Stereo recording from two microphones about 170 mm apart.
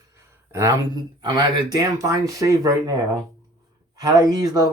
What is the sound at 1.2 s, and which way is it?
Speech, 25° right (ahead or behind).